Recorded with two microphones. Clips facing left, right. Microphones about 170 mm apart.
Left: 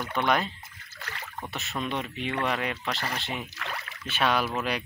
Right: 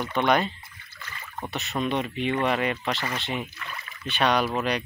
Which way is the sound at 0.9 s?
70° left (ahead or behind).